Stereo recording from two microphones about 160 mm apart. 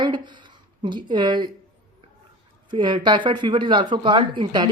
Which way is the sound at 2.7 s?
30° right (ahead or behind).